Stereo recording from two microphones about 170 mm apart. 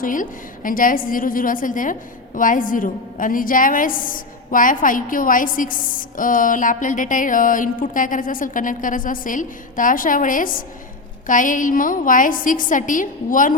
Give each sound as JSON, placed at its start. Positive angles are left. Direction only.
{"t": 0.0, "sound": "a woman's voice", "side_deg": 50}